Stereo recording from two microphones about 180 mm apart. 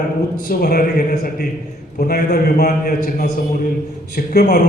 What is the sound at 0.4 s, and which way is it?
A man's voice, 55° left (ahead or behind).